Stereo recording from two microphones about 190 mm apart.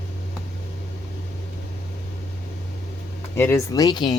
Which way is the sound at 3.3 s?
10° left (ahead or behind).